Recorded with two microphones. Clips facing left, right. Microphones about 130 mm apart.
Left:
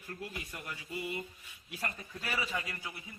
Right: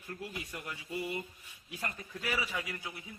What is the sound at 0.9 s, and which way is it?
Mantra, 35° right (ahead or behind).